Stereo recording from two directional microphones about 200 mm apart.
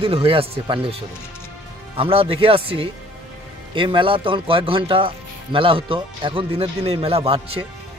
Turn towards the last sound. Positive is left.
turn(degrees=-30)  # may be behind; listen again after turning